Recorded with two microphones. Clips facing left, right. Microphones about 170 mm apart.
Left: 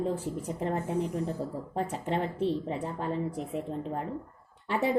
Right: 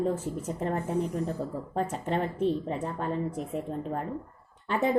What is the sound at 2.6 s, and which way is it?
A woman's voice, 15° left (ahead or behind).